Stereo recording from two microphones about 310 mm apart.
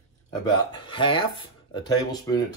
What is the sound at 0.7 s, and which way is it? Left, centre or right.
Speech, centre.